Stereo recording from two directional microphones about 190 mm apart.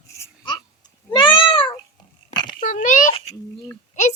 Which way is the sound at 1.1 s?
25° left (ahead or behind).